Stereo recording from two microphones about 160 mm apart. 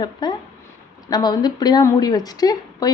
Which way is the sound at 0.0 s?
25° left (ahead or behind).